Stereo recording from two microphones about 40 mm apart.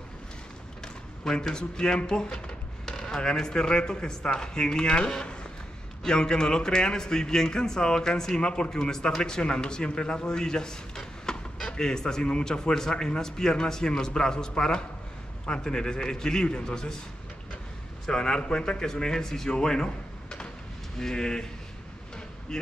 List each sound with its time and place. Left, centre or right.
1.5 s a man's voice: centre
11.3 s a sound: centre
11.7 s a man's voice: centre
18.0 s a man's voice: centre
22.5 s speech: centre